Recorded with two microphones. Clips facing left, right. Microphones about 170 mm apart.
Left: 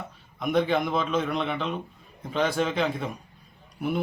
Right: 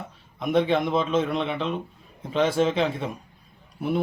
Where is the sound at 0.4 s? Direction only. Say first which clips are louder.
Right 2 dB; centre (ahead or behind).